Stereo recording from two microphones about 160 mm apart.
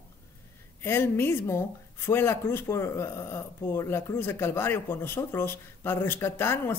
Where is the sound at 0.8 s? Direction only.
15° left (ahead or behind).